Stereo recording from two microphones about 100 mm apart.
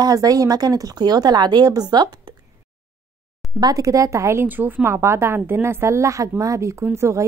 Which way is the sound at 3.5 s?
40° right (ahead or behind).